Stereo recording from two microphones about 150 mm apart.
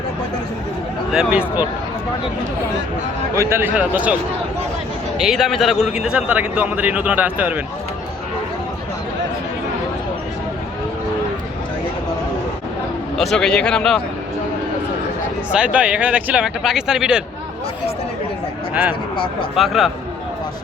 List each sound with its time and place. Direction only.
1.1 s speech: 5° right (ahead or behind)
3.3 s speech: 15° right (ahead or behind)
13.1 s speech: 5° left (ahead or behind)
15.5 s speech: 10° right (ahead or behind)
18.7 s speech: 10° right (ahead or behind)
19.1 s speech: 35° left (ahead or behind)
19.5 s speech: centre (ahead or behind)